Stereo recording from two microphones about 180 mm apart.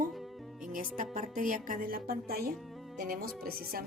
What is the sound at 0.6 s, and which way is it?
Speech, 50° right (ahead or behind).